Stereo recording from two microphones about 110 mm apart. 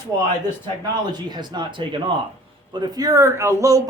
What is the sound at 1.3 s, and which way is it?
Speech, 40° right (ahead or behind).